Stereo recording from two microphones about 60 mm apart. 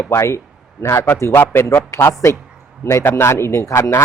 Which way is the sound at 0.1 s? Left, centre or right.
Left.